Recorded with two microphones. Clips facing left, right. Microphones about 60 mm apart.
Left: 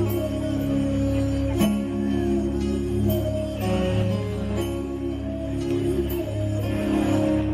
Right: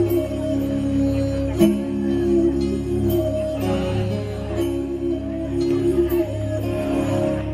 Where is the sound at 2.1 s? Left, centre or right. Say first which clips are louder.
Right 8 dB; left.